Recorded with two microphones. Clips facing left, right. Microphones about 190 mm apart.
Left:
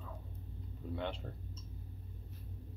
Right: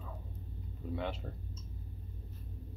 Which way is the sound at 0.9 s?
5° right (ahead or behind).